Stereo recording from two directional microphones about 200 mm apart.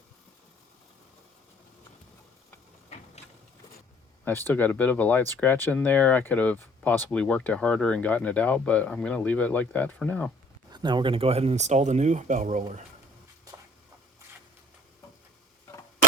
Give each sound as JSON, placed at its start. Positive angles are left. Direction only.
{"t": 2.9, "sound": "a sound", "side_deg": 35}
{"t": 4.3, "sound": "speech", "side_deg": 10}
{"t": 10.7, "sound": "speech", "side_deg": -20}